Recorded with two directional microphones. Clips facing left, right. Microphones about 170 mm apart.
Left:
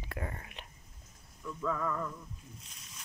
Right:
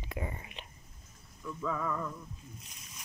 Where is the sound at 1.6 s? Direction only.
5° right (ahead or behind).